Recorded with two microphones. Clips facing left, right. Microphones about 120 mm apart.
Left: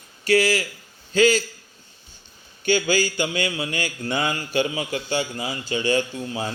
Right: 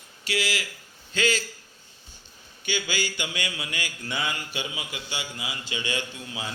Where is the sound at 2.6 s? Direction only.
45° left (ahead or behind).